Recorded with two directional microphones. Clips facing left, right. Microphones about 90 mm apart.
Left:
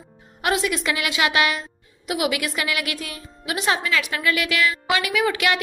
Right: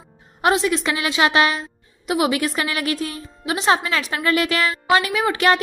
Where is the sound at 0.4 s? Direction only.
25° right (ahead or behind).